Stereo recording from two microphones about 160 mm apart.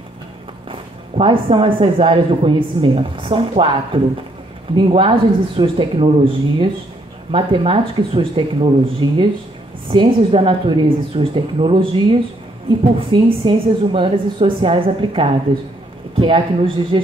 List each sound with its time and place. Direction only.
0.7 s speech: 35° right (ahead or behind)